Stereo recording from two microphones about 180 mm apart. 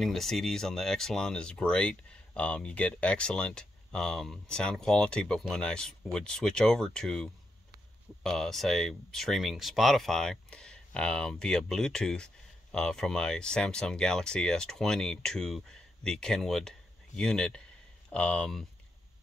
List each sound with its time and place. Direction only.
0.0 s speech: centre (ahead or behind)